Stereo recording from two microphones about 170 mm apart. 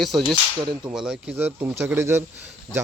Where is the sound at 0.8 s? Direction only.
5° right (ahead or behind).